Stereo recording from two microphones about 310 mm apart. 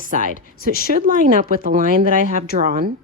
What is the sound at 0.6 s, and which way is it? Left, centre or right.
Speech, left.